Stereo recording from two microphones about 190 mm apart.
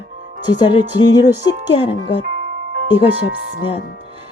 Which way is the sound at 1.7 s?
30° left (ahead or behind).